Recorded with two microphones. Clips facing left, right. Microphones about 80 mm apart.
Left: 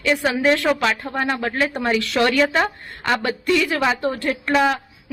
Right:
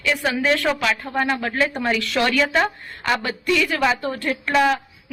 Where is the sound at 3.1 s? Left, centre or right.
Left.